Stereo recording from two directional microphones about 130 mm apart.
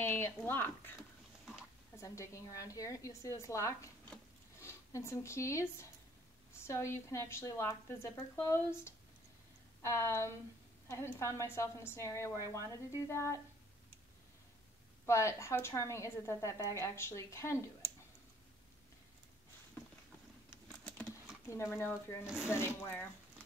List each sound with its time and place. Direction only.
0.0 s a sound: 15° left (ahead or behind)
0.5 s speech: 15° left (ahead or behind)
2.0 s a woman's voice: 25° left (ahead or behind)
15.0 s a woman's voice: 20° left (ahead or behind)
20.7 s typing: 5° left (ahead or behind)
21.7 s a woman's voice: 20° left (ahead or behind)
22.2 s speech: 5° right (ahead or behind)
22.5 s speech: 20° left (ahead or behind)